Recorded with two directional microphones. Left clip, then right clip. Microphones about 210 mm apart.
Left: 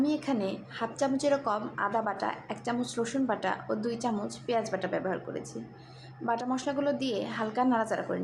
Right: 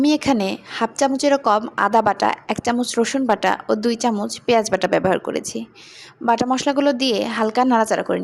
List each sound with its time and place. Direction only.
0.0 s a woman's voice: 50° right (ahead or behind)